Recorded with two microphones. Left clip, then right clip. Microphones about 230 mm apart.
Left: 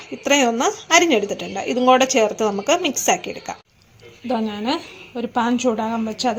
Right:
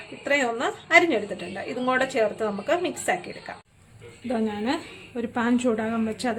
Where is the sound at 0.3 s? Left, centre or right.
Left.